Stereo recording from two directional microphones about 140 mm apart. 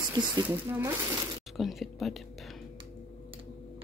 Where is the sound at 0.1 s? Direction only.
30° right (ahead or behind).